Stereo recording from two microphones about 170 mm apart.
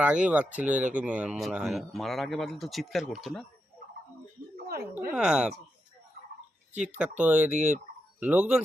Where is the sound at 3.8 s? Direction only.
50° right (ahead or behind).